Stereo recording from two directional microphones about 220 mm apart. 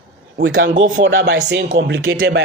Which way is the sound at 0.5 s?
45° right (ahead or behind).